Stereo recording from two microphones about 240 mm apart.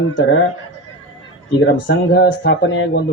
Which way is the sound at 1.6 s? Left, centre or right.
Left.